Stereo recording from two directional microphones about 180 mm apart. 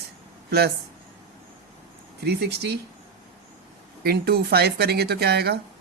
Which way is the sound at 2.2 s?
65° right (ahead or behind).